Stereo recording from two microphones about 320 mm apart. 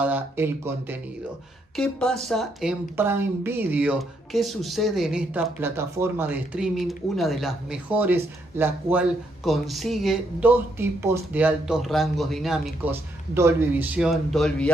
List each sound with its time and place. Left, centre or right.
0.0 s speech: centre